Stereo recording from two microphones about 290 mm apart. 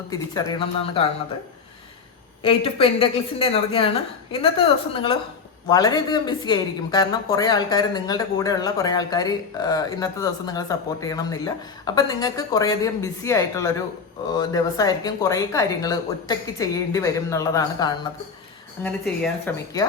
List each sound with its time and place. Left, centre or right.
0.5 s speech: centre
2.4 s speech: centre